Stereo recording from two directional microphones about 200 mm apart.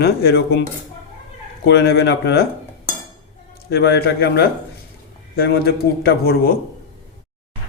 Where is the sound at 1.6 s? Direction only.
55° left (ahead or behind).